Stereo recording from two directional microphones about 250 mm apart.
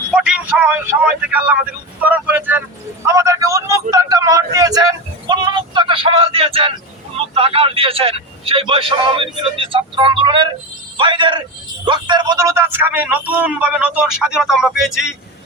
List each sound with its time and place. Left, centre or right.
0.1 s a man's voice: centre